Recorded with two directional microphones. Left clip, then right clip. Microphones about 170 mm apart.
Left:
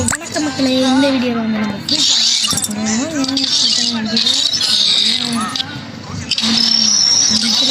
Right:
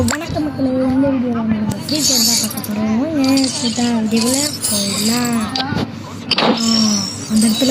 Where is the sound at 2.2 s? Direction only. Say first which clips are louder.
Left 2 dB; 50° left (ahead or behind).